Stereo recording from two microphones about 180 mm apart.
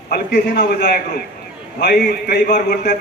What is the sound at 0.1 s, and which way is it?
A man's voice, 60° left (ahead or behind).